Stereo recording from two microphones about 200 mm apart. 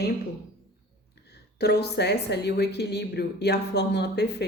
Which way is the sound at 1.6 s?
55° left (ahead or behind).